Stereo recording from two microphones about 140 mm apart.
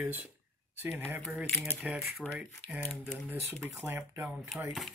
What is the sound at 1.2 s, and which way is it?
Speech, centre (ahead or behind).